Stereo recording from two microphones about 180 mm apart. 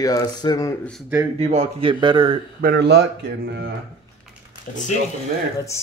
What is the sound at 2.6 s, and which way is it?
Speech, 65° right (ahead or behind).